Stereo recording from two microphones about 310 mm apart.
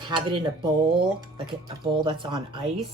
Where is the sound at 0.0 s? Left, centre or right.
Centre.